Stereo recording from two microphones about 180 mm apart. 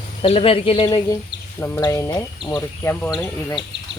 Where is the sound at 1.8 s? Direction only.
20° left (ahead or behind).